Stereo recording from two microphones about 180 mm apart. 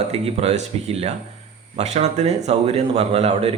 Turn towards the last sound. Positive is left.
turn(degrees=-35)  # may be behind; listen again after turning